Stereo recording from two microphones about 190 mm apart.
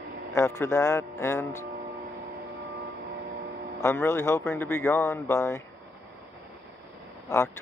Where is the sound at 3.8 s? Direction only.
15° left (ahead or behind).